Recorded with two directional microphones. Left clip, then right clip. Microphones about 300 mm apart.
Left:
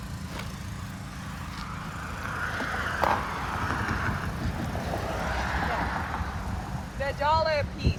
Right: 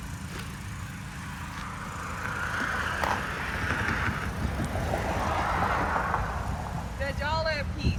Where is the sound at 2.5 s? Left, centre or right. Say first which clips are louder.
Right 2 dB; centre.